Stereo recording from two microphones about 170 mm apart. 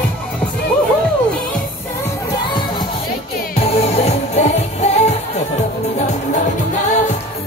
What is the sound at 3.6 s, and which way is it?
Music, 35° left (ahead or behind).